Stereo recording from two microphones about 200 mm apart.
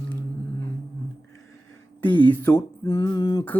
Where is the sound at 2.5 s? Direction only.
25° left (ahead or behind).